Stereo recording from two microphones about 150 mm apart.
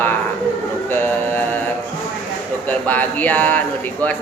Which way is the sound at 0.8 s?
15° left (ahead or behind).